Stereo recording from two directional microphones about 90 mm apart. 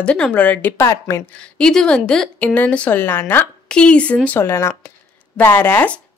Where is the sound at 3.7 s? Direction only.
10° left (ahead or behind).